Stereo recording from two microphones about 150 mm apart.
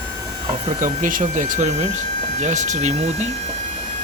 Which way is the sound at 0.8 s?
60° right (ahead or behind).